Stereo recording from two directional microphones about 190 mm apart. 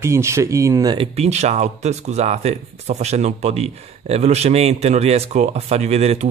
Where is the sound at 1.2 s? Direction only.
35° right (ahead or behind).